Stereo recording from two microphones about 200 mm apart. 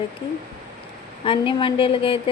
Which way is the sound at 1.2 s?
25° left (ahead or behind).